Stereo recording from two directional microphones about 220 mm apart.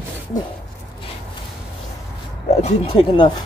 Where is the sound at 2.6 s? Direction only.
25° left (ahead or behind).